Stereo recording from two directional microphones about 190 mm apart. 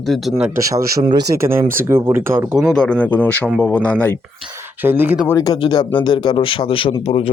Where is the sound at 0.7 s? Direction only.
15° right (ahead or behind); by 4.2 s 5° left (ahead or behind).